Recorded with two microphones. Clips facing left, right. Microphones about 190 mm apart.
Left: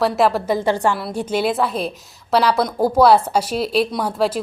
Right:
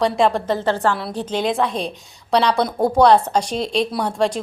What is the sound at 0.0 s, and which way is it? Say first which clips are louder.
A woman's voice: even; 5° left (ahead or behind).